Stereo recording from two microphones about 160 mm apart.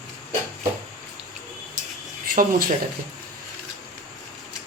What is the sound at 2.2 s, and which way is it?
Speech, 60° right (ahead or behind).